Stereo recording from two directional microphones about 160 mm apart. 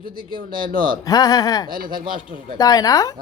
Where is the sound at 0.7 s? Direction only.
60° right (ahead or behind).